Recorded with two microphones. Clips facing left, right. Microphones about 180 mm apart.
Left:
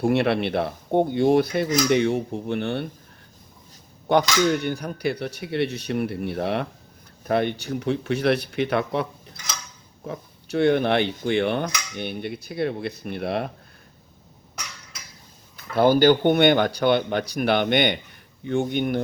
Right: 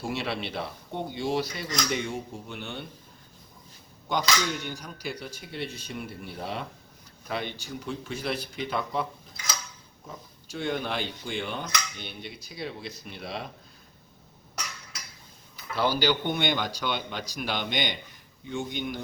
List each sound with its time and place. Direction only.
0.0 s speech: 60° left (ahead or behind)
4.1 s speech: 60° left (ahead or behind)
10.1 s speech: 65° left (ahead or behind)
15.7 s speech: 50° left (ahead or behind)